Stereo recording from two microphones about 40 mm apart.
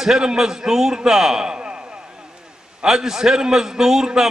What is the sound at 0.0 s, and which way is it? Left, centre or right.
A man's voice, centre.